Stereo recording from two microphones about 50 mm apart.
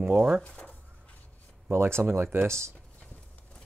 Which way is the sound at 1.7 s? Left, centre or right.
Right.